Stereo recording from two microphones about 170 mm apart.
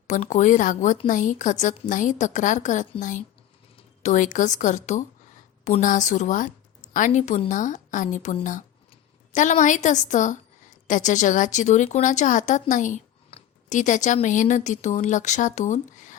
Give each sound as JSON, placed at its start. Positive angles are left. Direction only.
{"t": 0.1, "sound": "speech", "side_deg": 45}